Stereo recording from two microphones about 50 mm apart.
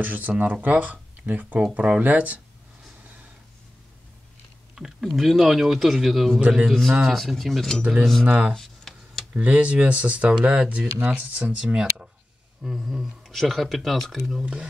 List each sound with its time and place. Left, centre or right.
0.0 s speech: right
5.0 s speech: centre
8.3 s speech: right
8.5 s a sound: centre
9.3 s speech: right
11.6 s speech: centre
12.6 s speech: centre
14.4 s speech: right